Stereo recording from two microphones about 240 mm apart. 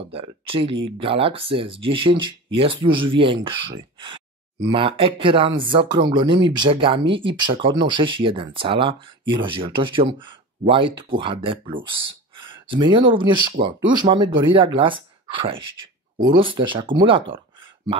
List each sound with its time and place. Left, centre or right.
0.0 s speech: right